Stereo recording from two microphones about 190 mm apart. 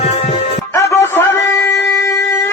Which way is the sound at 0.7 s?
15° left (ahead or behind).